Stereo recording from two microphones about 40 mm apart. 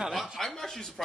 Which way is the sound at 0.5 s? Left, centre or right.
Centre.